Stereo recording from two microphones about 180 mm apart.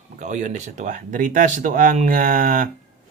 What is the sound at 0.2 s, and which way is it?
Speech, 45° right (ahead or behind).